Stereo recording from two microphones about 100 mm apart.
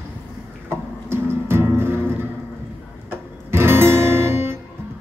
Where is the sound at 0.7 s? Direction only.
25° right (ahead or behind).